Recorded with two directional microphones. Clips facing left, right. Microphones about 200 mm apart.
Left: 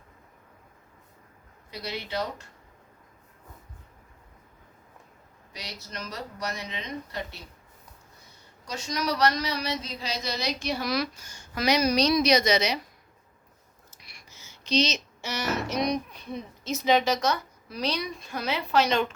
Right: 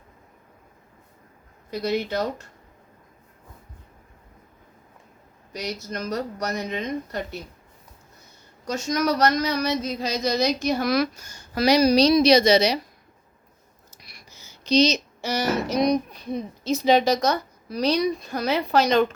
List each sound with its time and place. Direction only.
1.7 s speech: 45° right (ahead or behind)
5.5 s speech: 45° right (ahead or behind)
8.6 s speech: 45° right (ahead or behind)
13.9 s speech: 35° right (ahead or behind)